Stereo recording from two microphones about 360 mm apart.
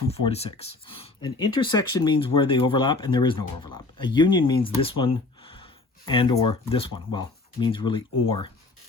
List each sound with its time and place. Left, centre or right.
0.1 s speech: centre